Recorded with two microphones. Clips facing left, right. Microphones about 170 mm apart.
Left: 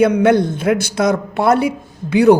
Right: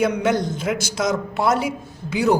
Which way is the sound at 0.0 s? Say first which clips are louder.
Left 7 dB; 60° left (ahead or behind).